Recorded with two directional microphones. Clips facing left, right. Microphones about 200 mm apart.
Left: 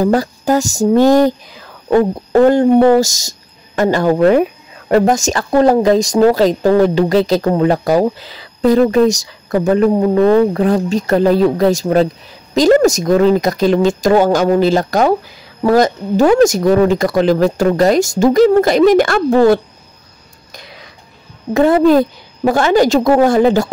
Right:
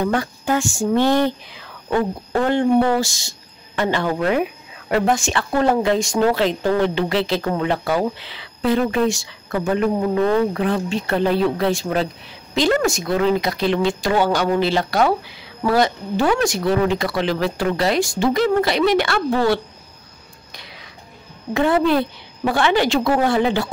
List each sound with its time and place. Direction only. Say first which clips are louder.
0.0 s speech: left 7 dB; 35° left (ahead or behind)
21.5 s a woman's voice: left 7 dB; 40° left (ahead or behind)